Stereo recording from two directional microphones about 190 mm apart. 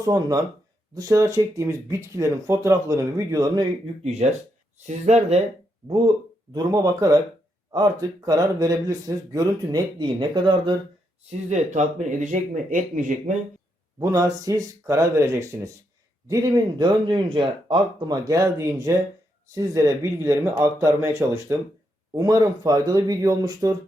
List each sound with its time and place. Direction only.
0.0 s speech: 20° right (ahead or behind)
4.0 s speech: 35° right (ahead or behind)
6.5 s speech: 20° right (ahead or behind)
11.3 s speech: 40° right (ahead or behind)
14.0 s speech: 20° right (ahead or behind)